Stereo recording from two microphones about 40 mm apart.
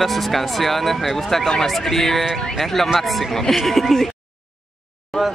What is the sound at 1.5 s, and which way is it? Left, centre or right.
Car alarm, centre.